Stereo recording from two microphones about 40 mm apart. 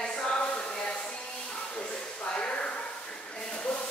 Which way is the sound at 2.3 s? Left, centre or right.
Left.